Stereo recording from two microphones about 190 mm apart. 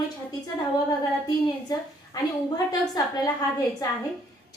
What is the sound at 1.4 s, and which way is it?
A woman's voice, 20° left (ahead or behind).